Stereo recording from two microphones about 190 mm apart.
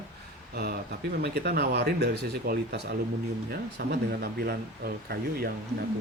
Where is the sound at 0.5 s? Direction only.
55° right (ahead or behind).